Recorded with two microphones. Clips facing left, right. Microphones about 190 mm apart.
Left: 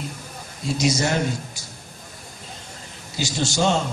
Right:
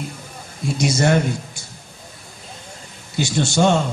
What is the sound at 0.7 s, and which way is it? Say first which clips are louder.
Speech: right 4 dB; 55° right (ahead or behind).